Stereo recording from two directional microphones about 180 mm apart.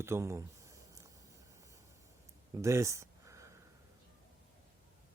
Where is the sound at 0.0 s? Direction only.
15° right (ahead or behind).